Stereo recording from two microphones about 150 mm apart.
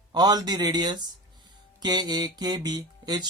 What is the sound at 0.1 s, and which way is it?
Speech, 25° right (ahead or behind).